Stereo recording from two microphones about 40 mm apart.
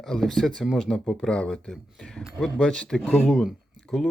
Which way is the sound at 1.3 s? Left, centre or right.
Left.